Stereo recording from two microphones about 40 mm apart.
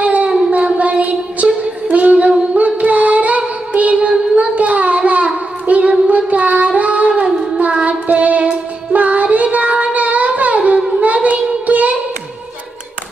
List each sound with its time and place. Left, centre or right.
0.0 s a sound: right
0.5 s music: right
4.1 s child singing: right
7.2 s humming: right
7.8 s child singing: right